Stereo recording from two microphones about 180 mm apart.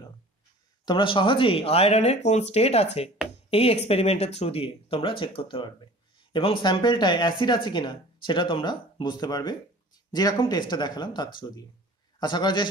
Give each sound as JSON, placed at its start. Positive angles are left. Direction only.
{"t": 0.8, "sound": "speech", "side_deg": 30}